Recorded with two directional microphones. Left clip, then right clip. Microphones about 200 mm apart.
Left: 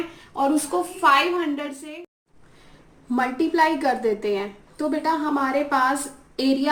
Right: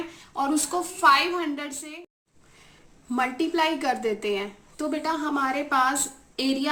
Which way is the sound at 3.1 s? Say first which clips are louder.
Left 3 dB; 15° right (ahead or behind).